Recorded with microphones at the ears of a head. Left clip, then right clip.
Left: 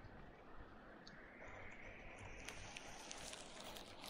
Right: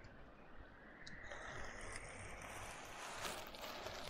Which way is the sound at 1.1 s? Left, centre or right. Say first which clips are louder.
Right 8 dB; right.